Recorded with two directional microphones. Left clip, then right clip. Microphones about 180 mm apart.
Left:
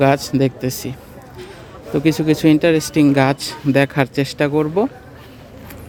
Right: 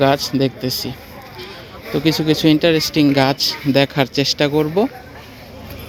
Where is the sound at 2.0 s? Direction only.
15° left (ahead or behind).